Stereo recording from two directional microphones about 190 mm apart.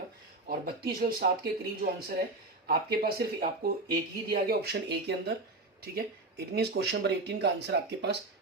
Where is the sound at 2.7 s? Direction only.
55° right (ahead or behind).